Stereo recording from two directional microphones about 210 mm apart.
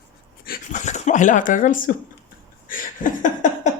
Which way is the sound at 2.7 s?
40° left (ahead or behind).